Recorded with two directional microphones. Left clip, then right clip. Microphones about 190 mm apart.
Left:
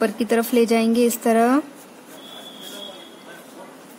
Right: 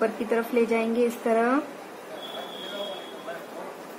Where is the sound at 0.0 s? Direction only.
55° left (ahead or behind).